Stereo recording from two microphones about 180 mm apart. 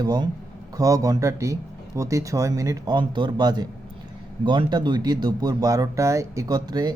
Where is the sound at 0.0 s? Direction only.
20° right (ahead or behind).